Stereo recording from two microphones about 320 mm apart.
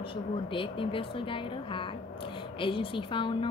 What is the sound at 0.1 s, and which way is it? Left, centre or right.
A woman's voice, centre.